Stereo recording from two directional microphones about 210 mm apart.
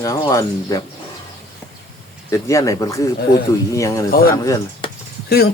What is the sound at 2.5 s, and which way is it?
Speech, 15° left (ahead or behind).